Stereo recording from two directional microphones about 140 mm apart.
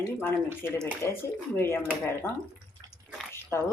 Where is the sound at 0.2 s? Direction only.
15° left (ahead or behind).